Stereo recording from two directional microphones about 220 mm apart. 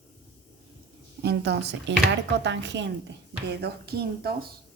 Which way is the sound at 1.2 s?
50° right (ahead or behind).